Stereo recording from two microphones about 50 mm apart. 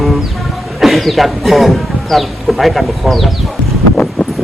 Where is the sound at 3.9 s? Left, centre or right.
Left.